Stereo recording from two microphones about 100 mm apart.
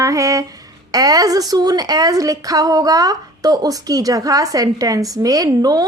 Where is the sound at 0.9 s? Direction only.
35° right (ahead or behind).